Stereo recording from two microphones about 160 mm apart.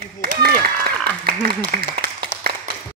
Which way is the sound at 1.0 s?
75° right (ahead or behind).